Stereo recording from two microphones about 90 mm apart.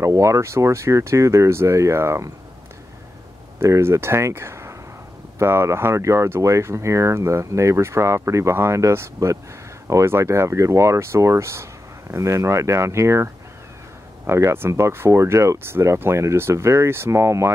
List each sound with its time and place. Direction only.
0.0 s speech: 35° right (ahead or behind)
3.5 s speech: 30° right (ahead or behind)